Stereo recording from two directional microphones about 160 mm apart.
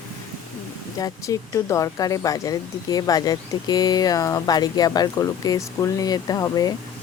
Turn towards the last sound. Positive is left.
turn(degrees=25)  # may be behind; listen again after turning